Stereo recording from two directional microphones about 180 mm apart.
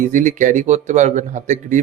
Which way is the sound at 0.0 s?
45° right (ahead or behind).